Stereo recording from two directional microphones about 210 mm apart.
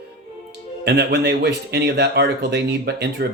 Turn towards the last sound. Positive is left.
turn(degrees=-50)  # may be behind; listen again after turning